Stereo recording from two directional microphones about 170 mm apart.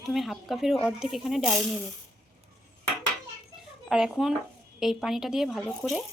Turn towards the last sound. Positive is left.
turn(degrees=0)  # may be behind; listen again after turning